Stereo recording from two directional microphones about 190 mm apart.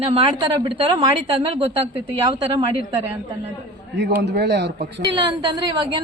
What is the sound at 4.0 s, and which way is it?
Speech, 65° right (ahead or behind).